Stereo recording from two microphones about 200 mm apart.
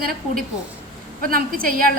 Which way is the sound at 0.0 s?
50° right (ahead or behind).